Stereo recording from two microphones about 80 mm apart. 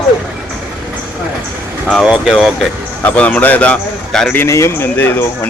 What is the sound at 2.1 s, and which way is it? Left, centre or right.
Speech, centre.